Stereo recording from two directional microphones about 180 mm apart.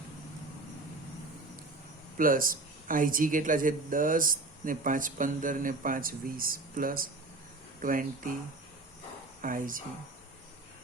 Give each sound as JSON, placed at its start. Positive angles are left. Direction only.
{"t": 2.1, "sound": "speech", "side_deg": -50}
{"t": 9.4, "sound": "speech", "side_deg": -50}